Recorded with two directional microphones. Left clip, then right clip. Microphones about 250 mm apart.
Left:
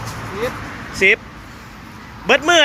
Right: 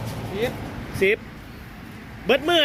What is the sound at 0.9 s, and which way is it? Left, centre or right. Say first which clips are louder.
Speech: left 7 dB; centre.